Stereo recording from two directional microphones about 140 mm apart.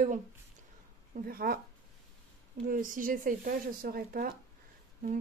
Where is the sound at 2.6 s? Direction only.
75° right (ahead or behind); by 4.3 s 90° right.